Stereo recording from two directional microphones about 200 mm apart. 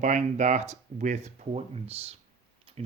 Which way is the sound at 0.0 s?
35° right (ahead or behind).